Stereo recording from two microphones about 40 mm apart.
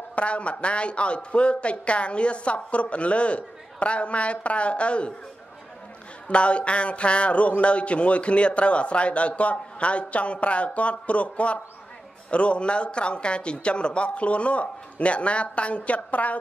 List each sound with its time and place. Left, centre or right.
0.1 s speech: left
6.2 s speech: left